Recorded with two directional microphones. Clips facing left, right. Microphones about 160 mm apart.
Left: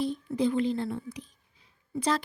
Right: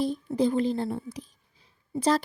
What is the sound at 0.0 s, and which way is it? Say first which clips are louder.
Speech: right 2 dB; 35° right (ahead or behind).